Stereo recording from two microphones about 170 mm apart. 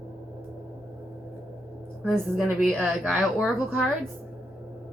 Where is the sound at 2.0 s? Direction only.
5° left (ahead or behind).